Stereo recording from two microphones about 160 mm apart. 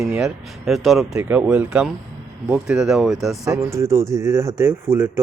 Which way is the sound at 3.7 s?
15° right (ahead or behind).